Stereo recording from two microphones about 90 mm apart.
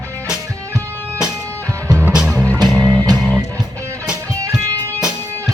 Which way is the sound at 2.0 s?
10° right (ahead or behind).